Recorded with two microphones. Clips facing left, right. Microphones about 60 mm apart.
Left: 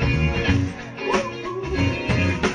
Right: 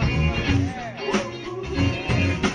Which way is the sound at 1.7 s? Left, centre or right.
Left.